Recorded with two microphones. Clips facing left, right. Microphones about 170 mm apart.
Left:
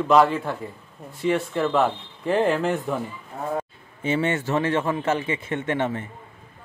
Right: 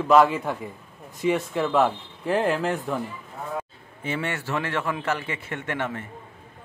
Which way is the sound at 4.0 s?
20° left (ahead or behind).